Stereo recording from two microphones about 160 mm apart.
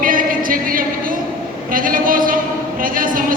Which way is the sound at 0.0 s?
60° right (ahead or behind).